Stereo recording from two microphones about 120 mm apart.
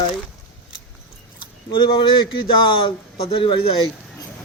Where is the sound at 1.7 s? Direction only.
45° left (ahead or behind).